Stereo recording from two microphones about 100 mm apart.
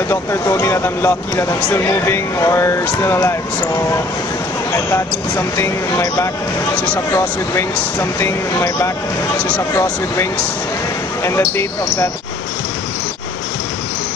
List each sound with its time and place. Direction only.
0.1 s speech: 30° left (ahead or behind)
5.6 s speech: 30° left (ahead or behind)